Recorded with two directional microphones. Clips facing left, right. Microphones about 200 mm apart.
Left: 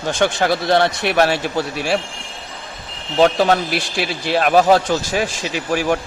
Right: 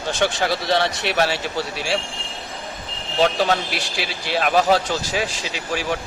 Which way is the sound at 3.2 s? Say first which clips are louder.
Left 5 dB; 50° left (ahead or behind).